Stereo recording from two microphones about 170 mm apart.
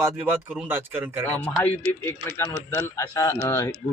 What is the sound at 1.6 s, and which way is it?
A man's voice, 10° left (ahead or behind).